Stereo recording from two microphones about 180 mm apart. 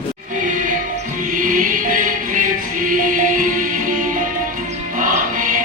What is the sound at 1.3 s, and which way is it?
Music, 50° right (ahead or behind).